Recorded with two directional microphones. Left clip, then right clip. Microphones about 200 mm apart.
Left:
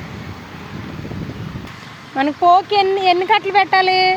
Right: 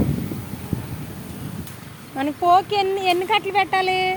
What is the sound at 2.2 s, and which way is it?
Speech, 30° left (ahead or behind).